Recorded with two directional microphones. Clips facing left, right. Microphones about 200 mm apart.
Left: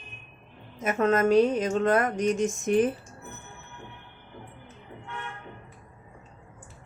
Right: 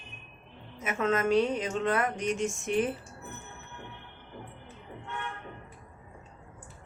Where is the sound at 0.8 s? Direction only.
40° left (ahead or behind).